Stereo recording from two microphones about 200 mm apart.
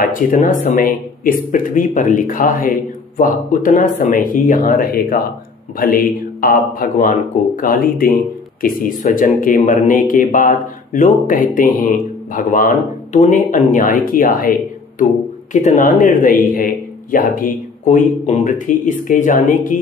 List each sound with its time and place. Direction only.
0.0 s speech: 40° left (ahead or behind)
15.5 s speech: 40° left (ahead or behind)